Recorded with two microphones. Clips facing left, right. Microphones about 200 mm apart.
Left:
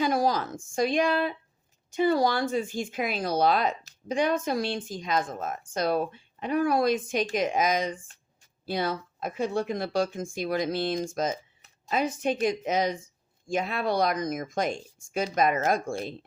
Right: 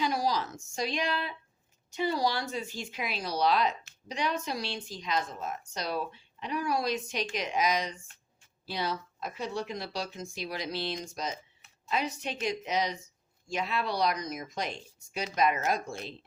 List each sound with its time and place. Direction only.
0.0 s speech: 50° left (ahead or behind)